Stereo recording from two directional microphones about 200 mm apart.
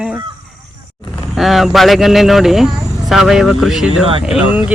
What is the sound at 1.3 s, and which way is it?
Speech, centre (ahead or behind).